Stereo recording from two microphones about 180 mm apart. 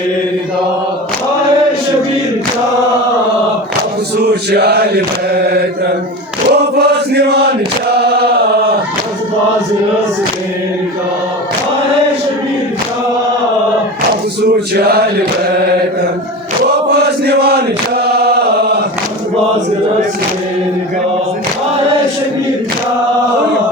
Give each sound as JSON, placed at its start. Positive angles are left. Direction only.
{"t": 4.5, "sound": "chant", "side_deg": -65}
{"t": 14.8, "sound": "chant", "side_deg": -60}
{"t": 16.9, "sound": "chant", "side_deg": -65}